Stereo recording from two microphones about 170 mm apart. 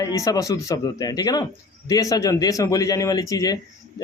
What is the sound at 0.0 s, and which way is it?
Speech, 20° left (ahead or behind).